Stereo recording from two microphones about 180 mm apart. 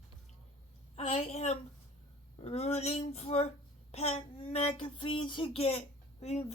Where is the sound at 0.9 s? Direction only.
35° left (ahead or behind).